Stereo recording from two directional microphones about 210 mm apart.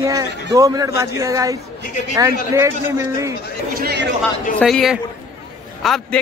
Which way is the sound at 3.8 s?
55° right (ahead or behind).